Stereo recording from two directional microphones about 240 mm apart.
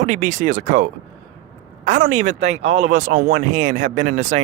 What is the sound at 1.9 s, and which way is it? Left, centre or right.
Speech, right.